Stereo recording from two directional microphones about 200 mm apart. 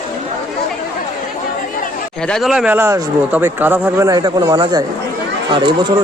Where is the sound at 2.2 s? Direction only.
Centre (ahead or behind).